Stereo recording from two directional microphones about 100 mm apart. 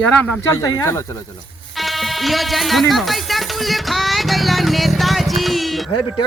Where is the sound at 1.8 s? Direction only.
Centre (ahead or behind).